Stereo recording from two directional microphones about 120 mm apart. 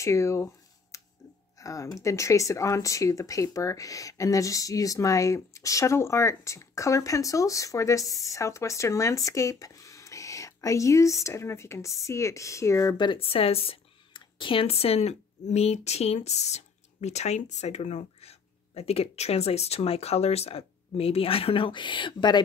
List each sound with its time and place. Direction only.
0.0 s speech: 25° left (ahead or behind)
0.9 s a sound: 25° left (ahead or behind)
1.6 s speech: 25° left (ahead or behind)
12.9 s speech: 40° left (ahead or behind)